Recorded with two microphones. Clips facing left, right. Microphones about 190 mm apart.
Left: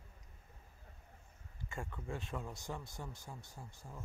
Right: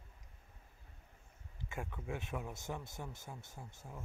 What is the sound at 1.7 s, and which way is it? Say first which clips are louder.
Speech: right 1 dB; 5° right (ahead or behind).